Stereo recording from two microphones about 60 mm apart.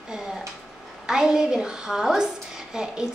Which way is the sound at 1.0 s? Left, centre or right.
Centre.